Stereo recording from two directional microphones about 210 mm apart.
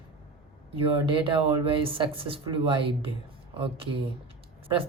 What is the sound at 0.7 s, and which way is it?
Speech, 25° right (ahead or behind).